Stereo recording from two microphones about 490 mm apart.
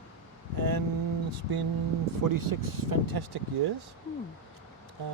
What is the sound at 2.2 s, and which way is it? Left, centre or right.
Speech, right.